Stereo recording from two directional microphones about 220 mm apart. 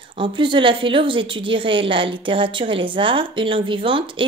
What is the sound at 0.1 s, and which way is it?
A woman's voice, 20° right (ahead or behind).